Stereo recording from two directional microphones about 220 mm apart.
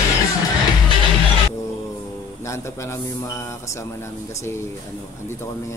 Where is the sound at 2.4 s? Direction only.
15° left (ahead or behind).